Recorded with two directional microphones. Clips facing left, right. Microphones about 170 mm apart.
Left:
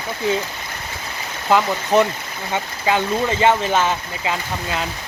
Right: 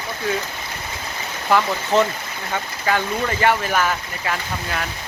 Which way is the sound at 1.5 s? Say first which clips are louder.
Left 2 dB; 20° left (ahead or behind).